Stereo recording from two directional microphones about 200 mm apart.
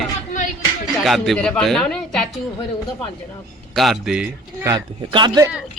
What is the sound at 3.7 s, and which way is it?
Speech, centre (ahead or behind).